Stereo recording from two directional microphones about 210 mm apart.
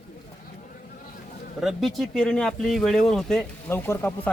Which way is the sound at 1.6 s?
Centre (ahead or behind).